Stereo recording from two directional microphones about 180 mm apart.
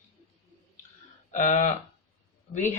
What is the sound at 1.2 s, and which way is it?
Speech, 45° left (ahead or behind).